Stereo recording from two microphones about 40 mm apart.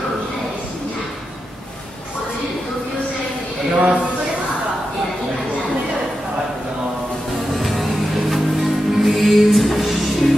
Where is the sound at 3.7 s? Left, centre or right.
Right.